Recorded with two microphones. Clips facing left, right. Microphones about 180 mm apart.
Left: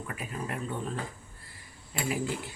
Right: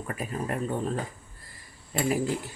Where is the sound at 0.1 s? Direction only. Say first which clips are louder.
Right 6 dB; 40° right (ahead or behind).